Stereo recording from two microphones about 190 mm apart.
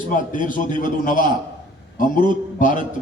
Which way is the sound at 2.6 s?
45° left (ahead or behind).